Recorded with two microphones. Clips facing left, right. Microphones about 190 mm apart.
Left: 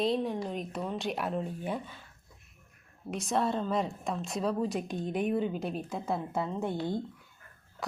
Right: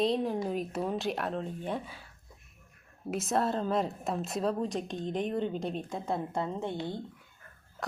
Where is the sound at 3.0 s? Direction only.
5° right (ahead or behind).